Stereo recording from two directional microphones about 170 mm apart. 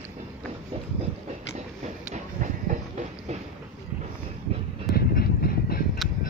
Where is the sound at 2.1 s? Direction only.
45° right (ahead or behind).